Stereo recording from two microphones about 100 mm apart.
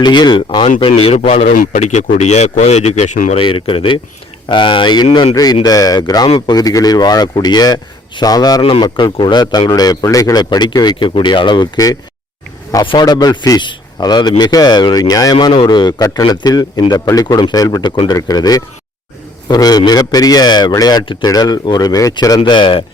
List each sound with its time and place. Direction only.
0.0 s a man's voice: 45° left (ahead or behind)
0.6 s speech: 65° left (ahead or behind); by 3.4 s 90° left
3.4 s a man's voice: 60° left (ahead or behind)
5.3 s a man's voice: 40° left (ahead or behind)
6.2 s a man's voice: 70° left (ahead or behind)
6.5 s a man's voice: 40° left (ahead or behind)
8.6 s a man's voice: 60° left (ahead or behind)
11.1 s a man's voice: 55° left (ahead or behind)
12.8 s speech: 60° left (ahead or behind)
13.1 s a man's voice: 45° left (ahead or behind)
18.1 s a man's voice: 40° left (ahead or behind)
21.0 s speech: 60° left (ahead or behind)
21.2 s a man's voice: 40° left (ahead or behind)
22.4 s speech: 55° left (ahead or behind)